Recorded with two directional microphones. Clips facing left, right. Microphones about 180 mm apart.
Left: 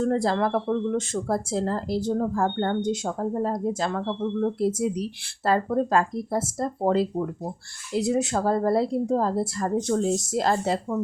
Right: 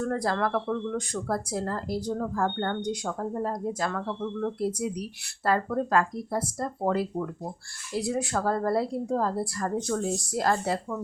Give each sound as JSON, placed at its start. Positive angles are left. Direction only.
{"t": 0.0, "sound": "speech", "side_deg": 25}